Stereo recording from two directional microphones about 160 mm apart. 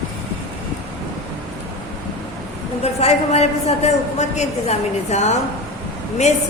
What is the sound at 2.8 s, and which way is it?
A woman's voice, 40° left (ahead or behind).